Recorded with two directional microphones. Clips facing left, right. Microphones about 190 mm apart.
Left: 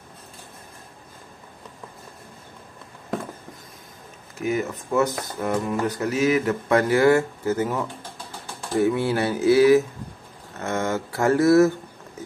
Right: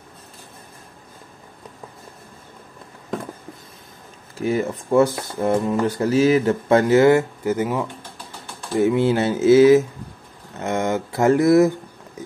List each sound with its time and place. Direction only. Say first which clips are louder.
4.4 s speech: right 3 dB; 30° right (ahead or behind)